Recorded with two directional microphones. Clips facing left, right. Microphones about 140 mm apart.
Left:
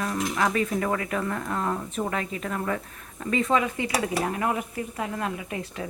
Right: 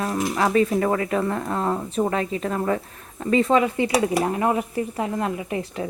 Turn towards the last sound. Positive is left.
turn(degrees=-25)  # may be behind; listen again after turning